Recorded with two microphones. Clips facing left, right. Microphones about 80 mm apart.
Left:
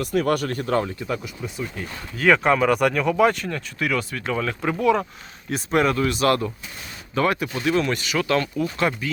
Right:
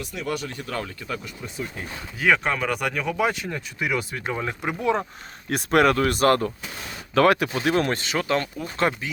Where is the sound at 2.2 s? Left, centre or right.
Centre.